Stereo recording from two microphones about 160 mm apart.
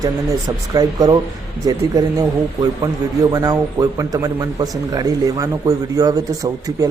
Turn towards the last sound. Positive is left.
turn(degrees=-20)  # may be behind; listen again after turning